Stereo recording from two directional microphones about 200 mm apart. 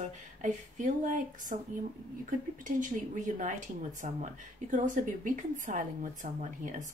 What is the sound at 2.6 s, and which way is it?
Speech, 40° right (ahead or behind).